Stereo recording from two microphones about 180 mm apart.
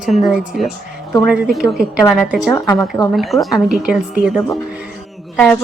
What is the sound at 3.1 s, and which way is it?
Speech, centre (ahead or behind).